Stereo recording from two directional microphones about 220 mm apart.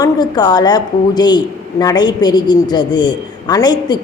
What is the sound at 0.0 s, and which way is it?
A woman's voice, 20° left (ahead or behind).